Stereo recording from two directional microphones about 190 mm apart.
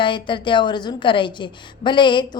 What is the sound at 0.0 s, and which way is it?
A woman's voice, 25° left (ahead or behind).